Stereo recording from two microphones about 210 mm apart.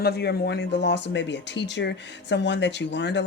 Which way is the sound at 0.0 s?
50° left (ahead or behind).